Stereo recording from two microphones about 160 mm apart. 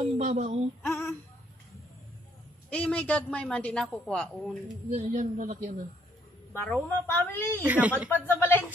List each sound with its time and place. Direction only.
0.0 s speech: 45° right (ahead or behind)
0.8 s female singing: 15° left (ahead or behind)
2.7 s a woman's voice: 10° left (ahead or behind)
4.9 s speech: 50° right (ahead or behind)
6.5 s a woman's voice: 10° left (ahead or behind)
7.6 s speech: 10° right (ahead or behind)
8.4 s a woman's voice: 15° left (ahead or behind)